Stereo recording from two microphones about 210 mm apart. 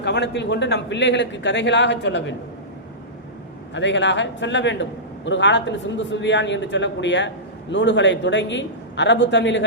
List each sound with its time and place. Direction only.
0.0 s a man's voice: 55° left (ahead or behind)
3.8 s a man's voice: 60° left (ahead or behind)